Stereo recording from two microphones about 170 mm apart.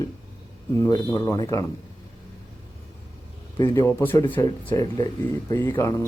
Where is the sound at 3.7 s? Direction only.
15° left (ahead or behind).